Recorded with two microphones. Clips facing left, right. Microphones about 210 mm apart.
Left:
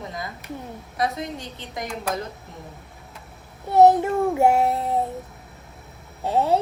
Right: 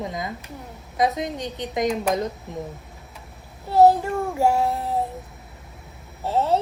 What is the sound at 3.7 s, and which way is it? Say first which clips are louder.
Child singing: left 1 dB; 20° left (ahead or behind).